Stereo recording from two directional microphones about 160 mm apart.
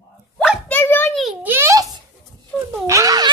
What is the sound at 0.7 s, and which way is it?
Speech, 10° left (ahead or behind).